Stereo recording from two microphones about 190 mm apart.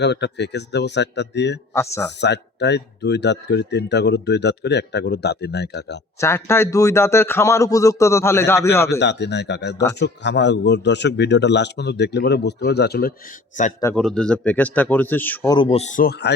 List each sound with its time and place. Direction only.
0.0 s a man's voice: 65° left (ahead or behind)
1.7 s a man's voice: 15° left (ahead or behind)
2.2 s a man's voice: 65° left (ahead or behind)
6.1 s a man's voice: 15° left (ahead or behind)
9.0 s a man's voice: 65° left (ahead or behind)
13.9 s a man's voice: centre (ahead or behind)
15.5 s speech: 30° left (ahead or behind); by 16.3 s 50° left (ahead or behind)